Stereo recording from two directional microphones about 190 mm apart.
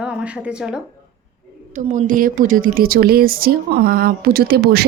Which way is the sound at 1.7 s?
40° right (ahead or behind).